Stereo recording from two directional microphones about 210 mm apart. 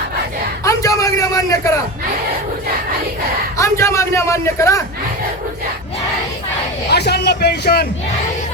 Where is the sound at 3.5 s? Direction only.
15° left (ahead or behind).